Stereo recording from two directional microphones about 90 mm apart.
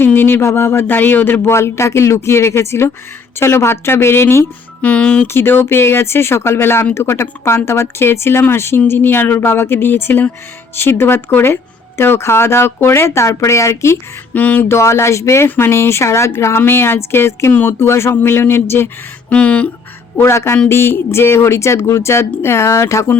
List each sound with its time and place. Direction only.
0.0 s speech: 25° left (ahead or behind)
4.8 s speech: 15° left (ahead or behind)
5.3 s speech: 25° left (ahead or behind)
14.4 s speech: 20° left (ahead or behind)
14.8 s speech: 30° left (ahead or behind)
19.3 s speech: 10° left (ahead or behind)
20.1 s speech: 30° left (ahead or behind)